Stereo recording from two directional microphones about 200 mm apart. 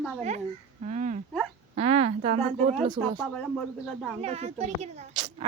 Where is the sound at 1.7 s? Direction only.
30° right (ahead or behind).